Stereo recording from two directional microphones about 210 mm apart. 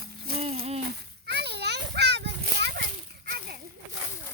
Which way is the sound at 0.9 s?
50° right (ahead or behind).